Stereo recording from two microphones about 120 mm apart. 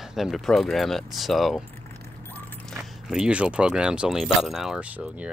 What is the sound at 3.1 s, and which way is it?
Speech, 10° right (ahead or behind).